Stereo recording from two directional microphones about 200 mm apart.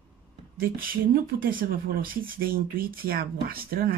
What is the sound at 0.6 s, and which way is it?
Speech, 45° right (ahead or behind).